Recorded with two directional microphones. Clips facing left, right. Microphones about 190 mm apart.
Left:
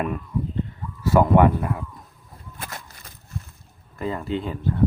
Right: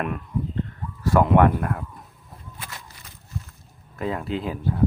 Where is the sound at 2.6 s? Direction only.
50° left (ahead or behind).